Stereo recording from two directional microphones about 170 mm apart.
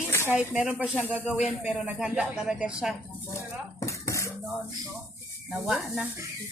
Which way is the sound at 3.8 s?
20° left (ahead or behind).